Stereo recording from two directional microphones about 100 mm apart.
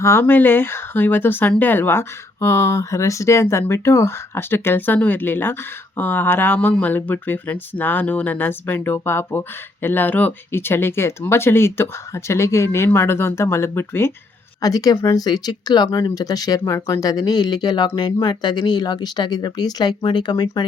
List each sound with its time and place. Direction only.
0.0 s speech: 25° left (ahead or behind)
14.6 s speech: 40° left (ahead or behind)